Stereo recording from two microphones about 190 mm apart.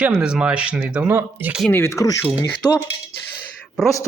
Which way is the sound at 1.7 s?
15° left (ahead or behind).